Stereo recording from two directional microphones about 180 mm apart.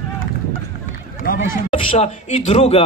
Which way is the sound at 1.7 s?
30° left (ahead or behind).